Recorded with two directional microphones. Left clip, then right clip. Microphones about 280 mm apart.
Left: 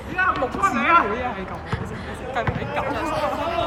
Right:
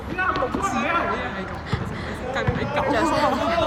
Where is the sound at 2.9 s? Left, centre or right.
Right.